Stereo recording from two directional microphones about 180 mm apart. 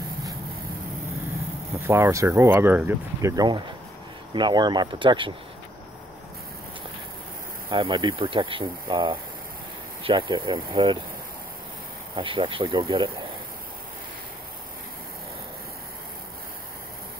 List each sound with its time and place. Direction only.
1.9 s speech: 15° right (ahead or behind)
7.7 s speech: 25° right (ahead or behind)
12.2 s speech: 30° right (ahead or behind)